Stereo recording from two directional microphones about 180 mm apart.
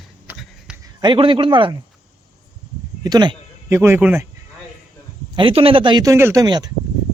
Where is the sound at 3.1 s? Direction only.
25° right (ahead or behind).